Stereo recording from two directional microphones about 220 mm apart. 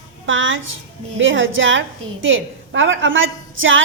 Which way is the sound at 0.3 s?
60° right (ahead or behind).